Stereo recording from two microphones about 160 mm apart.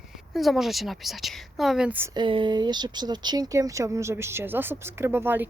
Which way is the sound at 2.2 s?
30° right (ahead or behind).